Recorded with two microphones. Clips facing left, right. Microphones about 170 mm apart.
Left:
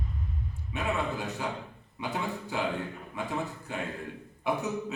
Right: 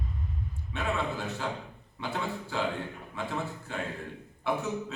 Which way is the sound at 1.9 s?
15° left (ahead or behind).